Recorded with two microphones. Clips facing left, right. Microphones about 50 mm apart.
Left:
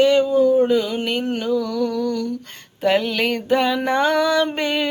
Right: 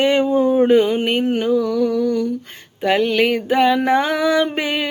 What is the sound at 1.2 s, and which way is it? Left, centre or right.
Music, centre.